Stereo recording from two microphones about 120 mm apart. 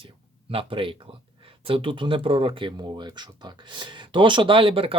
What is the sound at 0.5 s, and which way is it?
Speech, 45° right (ahead or behind).